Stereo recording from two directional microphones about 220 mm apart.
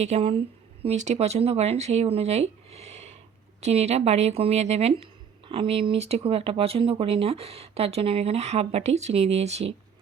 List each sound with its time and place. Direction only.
0.0 s speech: 30° right (ahead or behind)